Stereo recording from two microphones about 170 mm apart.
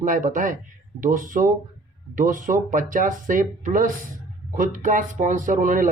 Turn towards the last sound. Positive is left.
turn(degrees=-50)  # may be behind; listen again after turning